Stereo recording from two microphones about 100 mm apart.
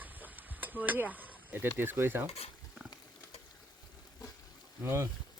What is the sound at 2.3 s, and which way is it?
Speech, 90° left.